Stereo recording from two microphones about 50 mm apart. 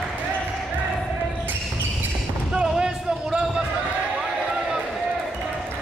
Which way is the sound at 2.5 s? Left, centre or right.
Centre.